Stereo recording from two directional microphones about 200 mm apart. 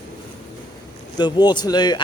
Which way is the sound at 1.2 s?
20° left (ahead or behind).